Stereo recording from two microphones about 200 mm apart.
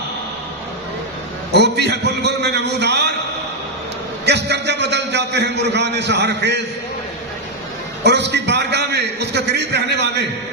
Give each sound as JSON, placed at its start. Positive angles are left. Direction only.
{"t": 1.5, "sound": "a man's voice", "side_deg": -55}
{"t": 4.3, "sound": "a man's voice", "side_deg": -60}
{"t": 8.0, "sound": "a man's voice", "side_deg": -60}